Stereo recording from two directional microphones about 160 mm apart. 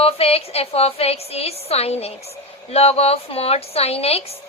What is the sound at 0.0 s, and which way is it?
A woman's voice, 40° left (ahead or behind).